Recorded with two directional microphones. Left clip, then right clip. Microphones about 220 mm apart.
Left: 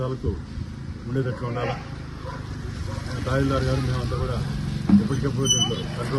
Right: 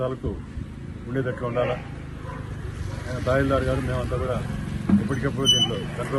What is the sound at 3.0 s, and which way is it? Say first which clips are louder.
Speech: right 3 dB; 45° left (ahead or behind).